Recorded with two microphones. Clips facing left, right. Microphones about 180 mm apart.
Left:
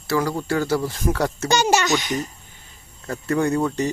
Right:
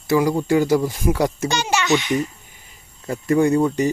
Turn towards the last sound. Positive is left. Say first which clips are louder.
# right 4 dB
turn(degrees=-10)  # may be behind; listen again after turning